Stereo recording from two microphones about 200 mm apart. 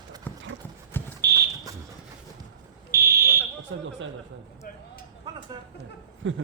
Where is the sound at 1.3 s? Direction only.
15° right (ahead or behind).